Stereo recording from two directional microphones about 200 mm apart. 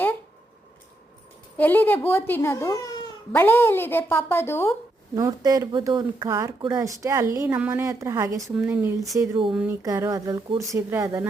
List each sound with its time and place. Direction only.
1.5 s a woman's voice: 10° left (ahead or behind)
5.1 s a woman's voice: 20° right (ahead or behind)
9.5 s speech: 5° right (ahead or behind)
9.8 s a woman's voice: 15° right (ahead or behind)